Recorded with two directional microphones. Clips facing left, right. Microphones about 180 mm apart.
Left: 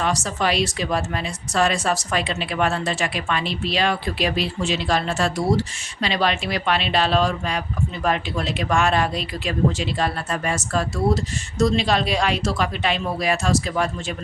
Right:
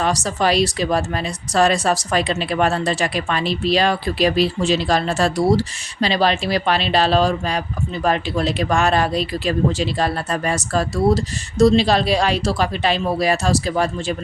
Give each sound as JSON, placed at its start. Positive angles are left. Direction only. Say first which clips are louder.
{"t": 0.0, "sound": "speech", "louder": "right 3 dB", "side_deg": -35}